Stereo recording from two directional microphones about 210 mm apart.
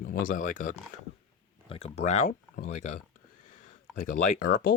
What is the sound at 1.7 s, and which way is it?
Speech, 25° left (ahead or behind).